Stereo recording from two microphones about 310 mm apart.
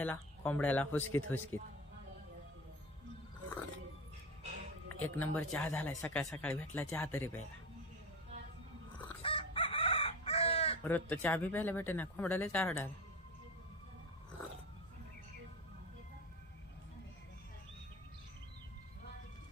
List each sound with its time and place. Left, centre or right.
0.0 s a man's voice: centre
5.0 s a man's voice: centre
9.2 s chicken: centre
10.8 s a man's voice: centre